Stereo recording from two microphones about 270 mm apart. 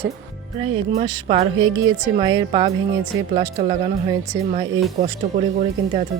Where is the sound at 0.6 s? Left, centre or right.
Centre.